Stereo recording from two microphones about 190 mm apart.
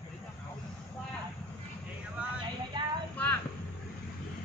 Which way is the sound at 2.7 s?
25° right (ahead or behind).